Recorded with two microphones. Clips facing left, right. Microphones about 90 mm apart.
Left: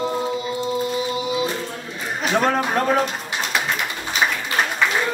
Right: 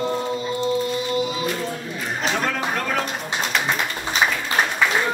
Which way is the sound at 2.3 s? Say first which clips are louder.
Left 10 dB; 35° left (ahead or behind).